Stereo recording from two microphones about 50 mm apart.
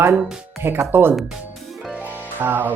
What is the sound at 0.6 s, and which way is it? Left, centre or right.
Speech, right.